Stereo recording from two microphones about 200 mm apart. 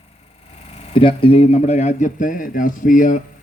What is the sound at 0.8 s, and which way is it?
A man's voice, 30° left (ahead or behind).